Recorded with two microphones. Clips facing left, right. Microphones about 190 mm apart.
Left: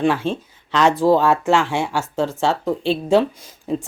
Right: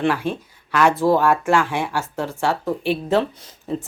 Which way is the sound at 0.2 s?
15° right (ahead or behind).